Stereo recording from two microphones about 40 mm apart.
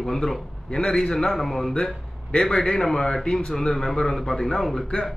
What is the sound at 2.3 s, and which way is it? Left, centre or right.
A man's voice, centre.